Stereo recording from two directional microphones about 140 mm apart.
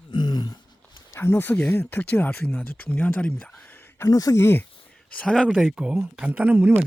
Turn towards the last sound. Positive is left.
turn(degrees=-10)  # may be behind; listen again after turning